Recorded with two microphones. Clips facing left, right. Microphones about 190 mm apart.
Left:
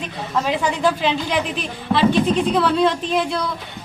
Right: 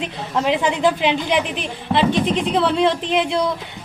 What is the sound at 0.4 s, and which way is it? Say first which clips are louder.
A woman's voice: right 3 dB; 20° right (ahead or behind).